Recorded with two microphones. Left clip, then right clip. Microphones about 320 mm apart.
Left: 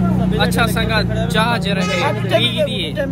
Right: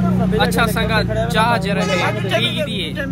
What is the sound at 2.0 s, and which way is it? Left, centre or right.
Speech, left.